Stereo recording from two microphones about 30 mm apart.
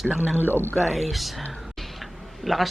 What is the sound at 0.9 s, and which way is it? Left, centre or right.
Speech, centre.